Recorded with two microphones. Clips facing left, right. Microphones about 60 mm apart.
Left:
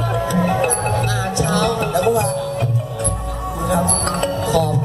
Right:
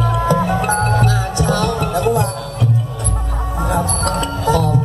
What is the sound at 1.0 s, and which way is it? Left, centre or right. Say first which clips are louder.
Music: right 2 dB; right.